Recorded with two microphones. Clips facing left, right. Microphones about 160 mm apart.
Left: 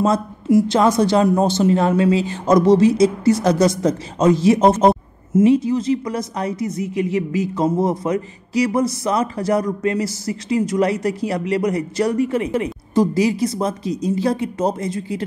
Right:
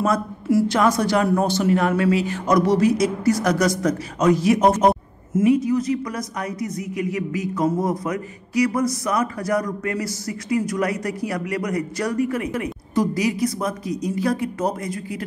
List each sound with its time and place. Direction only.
0.0 s a woman's voice: 20° left (ahead or behind)